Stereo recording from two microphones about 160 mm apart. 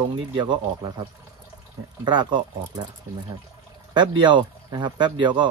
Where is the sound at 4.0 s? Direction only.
30° right (ahead or behind).